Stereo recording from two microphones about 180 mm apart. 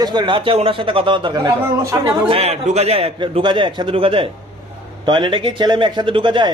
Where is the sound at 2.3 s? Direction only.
35° right (ahead or behind).